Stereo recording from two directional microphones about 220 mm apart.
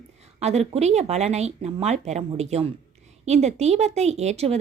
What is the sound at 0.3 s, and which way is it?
A woman's voice, 30° right (ahead or behind).